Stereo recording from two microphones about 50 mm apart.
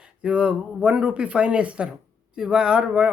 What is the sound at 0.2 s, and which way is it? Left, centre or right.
Speech, centre.